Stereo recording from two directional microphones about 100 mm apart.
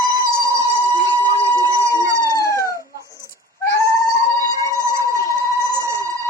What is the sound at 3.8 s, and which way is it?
Cat, 35° left (ahead or behind).